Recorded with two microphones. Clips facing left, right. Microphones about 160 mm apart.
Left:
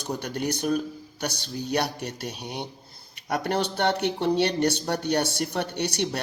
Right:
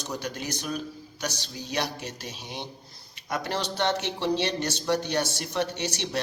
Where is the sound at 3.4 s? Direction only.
55° left (ahead or behind).